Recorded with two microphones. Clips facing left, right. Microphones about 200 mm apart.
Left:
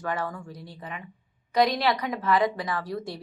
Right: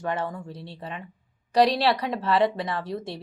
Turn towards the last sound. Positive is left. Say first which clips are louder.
# right 1 dB
turn(degrees=-25)  # may be behind; listen again after turning